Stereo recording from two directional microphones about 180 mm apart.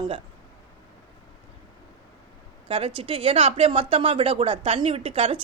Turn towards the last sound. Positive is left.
turn(degrees=-30)  # may be behind; listen again after turning